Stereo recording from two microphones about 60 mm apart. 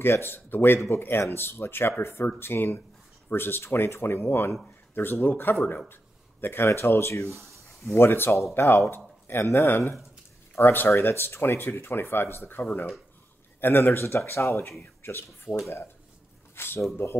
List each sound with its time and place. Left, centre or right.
0.2 s speech: left
14.8 s speech: left
16.5 s speech: left